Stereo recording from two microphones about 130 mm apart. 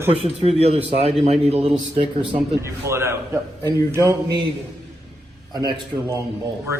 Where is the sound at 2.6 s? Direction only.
20° right (ahead or behind).